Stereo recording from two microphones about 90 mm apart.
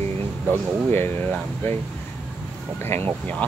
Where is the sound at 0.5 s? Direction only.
25° left (ahead or behind).